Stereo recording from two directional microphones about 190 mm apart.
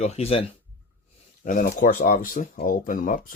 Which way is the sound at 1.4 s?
45° left (ahead or behind).